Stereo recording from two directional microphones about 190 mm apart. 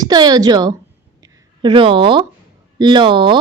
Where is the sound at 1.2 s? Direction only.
25° right (ahead or behind).